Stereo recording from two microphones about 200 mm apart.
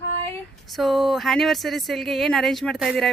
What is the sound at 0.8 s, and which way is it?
Speech, centre (ahead or behind).